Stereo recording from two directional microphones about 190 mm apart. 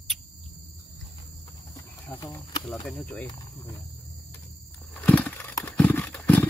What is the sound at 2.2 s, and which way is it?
Speech, 20° left (ahead or behind).